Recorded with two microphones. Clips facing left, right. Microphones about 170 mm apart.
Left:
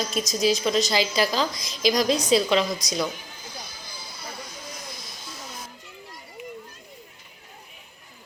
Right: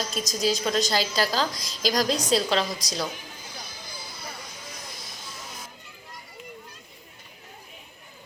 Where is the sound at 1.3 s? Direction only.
40° right (ahead or behind).